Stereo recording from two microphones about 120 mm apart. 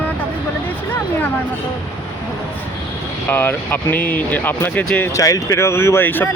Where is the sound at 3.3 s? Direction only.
15° left (ahead or behind).